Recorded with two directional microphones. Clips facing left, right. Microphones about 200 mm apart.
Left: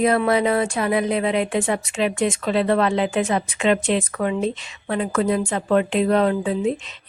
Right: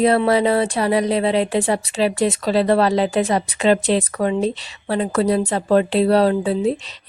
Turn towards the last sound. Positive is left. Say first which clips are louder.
# right 2 dB
turn(degrees=-35)  # may be behind; listen again after turning